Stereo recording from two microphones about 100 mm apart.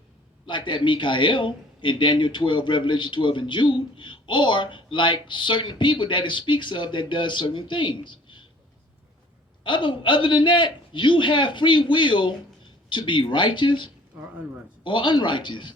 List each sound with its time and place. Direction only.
0.4 s a man's voice: 55° left (ahead or behind)
9.6 s a man's voice: 55° left (ahead or behind)